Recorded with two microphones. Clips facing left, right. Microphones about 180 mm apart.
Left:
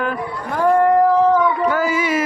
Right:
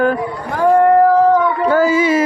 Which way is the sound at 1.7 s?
30° right (ahead or behind).